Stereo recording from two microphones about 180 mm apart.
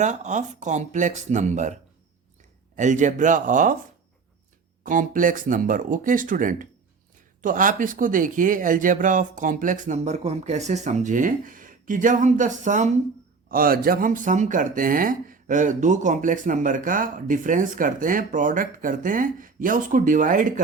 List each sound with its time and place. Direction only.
0.0 s speech: 40° right (ahead or behind)
4.8 s speech: 45° right (ahead or behind)
13.5 s speech: 55° right (ahead or behind)